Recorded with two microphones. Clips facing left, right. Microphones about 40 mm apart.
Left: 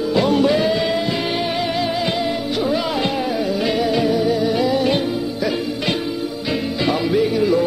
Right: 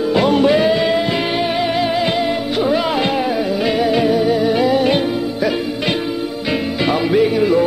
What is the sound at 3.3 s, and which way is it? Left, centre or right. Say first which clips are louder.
Music: right 2 dB; right.